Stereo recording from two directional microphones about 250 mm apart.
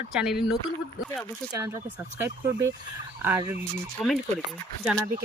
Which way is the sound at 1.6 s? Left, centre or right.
Centre.